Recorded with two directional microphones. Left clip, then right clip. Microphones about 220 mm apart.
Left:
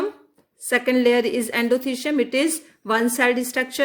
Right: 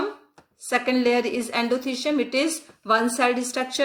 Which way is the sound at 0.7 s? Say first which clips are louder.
Left 3 dB; 40° left (ahead or behind).